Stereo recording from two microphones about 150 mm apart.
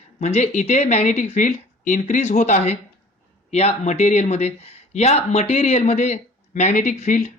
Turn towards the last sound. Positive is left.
turn(degrees=55)  # may be behind; listen again after turning